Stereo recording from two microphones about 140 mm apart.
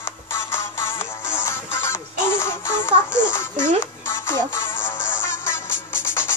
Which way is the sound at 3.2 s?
15° left (ahead or behind).